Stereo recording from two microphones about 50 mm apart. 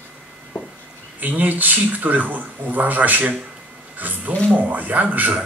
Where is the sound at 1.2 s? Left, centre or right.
Right.